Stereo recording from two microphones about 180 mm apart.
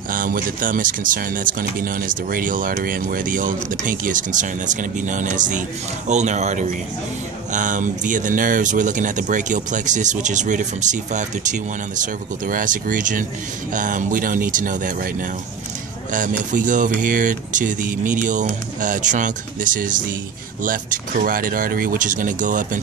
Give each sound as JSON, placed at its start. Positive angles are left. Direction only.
{"t": 0.1, "sound": "speech", "side_deg": -50}